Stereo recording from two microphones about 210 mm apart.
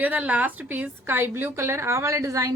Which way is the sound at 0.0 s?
5° right (ahead or behind).